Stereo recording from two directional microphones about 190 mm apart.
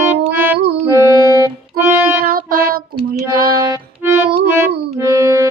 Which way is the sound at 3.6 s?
15° right (ahead or behind).